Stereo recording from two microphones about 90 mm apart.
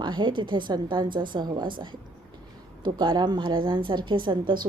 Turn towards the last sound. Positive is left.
turn(degrees=-60)  # may be behind; listen again after turning